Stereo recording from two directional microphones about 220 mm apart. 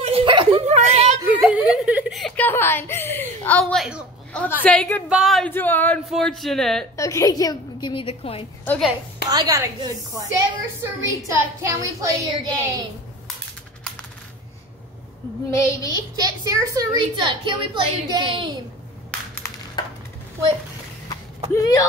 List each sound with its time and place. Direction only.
0.0 s a sound: 25° right (ahead or behind)
1.3 s chuckle: 5° right (ahead or behind)
5.1 s speech: centre (ahead or behind)
7.0 s a woman's voice: 15° left (ahead or behind)
8.6 s a woman's voice: 5° left (ahead or behind)
9.3 s a woman's voice: 15° right (ahead or behind)
15.5 s a woman's voice: 15° left (ahead or behind)
16.2 s a woman's voice: 15° right (ahead or behind)
21.5 s a woman's voice: 15° left (ahead or behind)